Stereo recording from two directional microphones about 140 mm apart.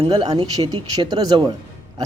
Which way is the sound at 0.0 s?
35° right (ahead or behind).